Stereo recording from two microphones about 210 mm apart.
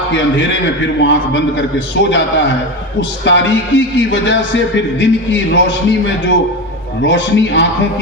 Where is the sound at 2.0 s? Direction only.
60° left (ahead or behind).